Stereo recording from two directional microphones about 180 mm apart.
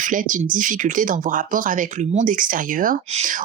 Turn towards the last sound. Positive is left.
turn(degrees=-40)  # may be behind; listen again after turning